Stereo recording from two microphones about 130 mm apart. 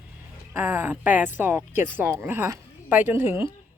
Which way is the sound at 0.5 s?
15° right (ahead or behind).